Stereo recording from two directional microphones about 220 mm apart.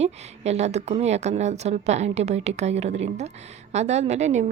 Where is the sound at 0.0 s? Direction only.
30° right (ahead or behind).